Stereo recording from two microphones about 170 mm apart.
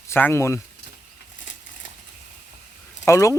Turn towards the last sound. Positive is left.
turn(degrees=15)  # may be behind; listen again after turning